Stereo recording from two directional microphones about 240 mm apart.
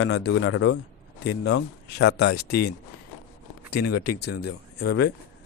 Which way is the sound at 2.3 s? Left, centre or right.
Left.